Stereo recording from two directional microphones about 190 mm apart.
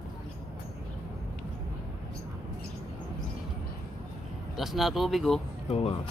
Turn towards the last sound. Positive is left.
turn(degrees=35)  # may be behind; listen again after turning